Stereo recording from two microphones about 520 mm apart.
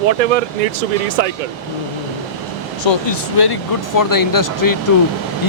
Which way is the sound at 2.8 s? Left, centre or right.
Left.